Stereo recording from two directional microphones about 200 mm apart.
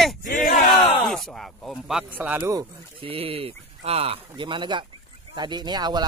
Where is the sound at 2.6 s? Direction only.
25° right (ahead or behind).